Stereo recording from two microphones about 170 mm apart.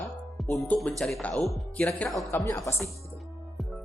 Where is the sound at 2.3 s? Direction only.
15° left (ahead or behind).